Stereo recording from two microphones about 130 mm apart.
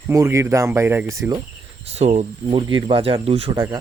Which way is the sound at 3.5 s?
30° right (ahead or behind).